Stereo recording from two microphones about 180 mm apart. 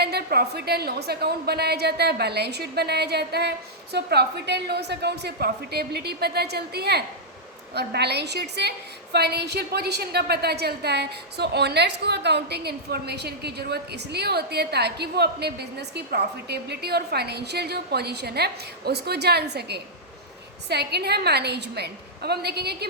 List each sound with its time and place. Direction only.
0.0 s a woman's voice: 60° right (ahead or behind)